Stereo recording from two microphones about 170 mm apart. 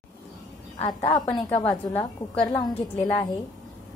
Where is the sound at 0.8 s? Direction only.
30° left (ahead or behind); by 2.4 s 15° left (ahead or behind).